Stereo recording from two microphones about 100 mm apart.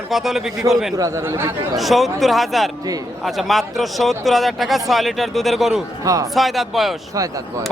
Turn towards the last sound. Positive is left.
turn(degrees=0)  # may be behind; listen again after turning